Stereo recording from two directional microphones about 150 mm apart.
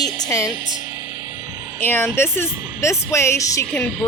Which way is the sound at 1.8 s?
15° left (ahead or behind).